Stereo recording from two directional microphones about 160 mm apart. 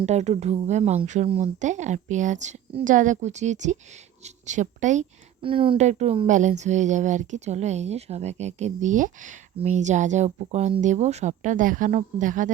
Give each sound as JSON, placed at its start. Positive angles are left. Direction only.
{"t": 0.0, "sound": "speech", "side_deg": -45}
{"t": 5.4, "sound": "speech", "side_deg": -35}